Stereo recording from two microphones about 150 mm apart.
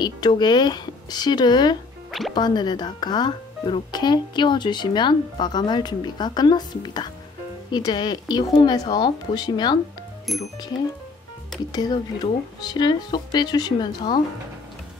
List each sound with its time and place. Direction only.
0.0 s speech: 30° left (ahead or behind)
2.0 s music: centre (ahead or behind)
2.3 s speech: 30° left (ahead or behind)
10.3 s speech: centre (ahead or behind)
11.7 s speech: 30° left (ahead or behind)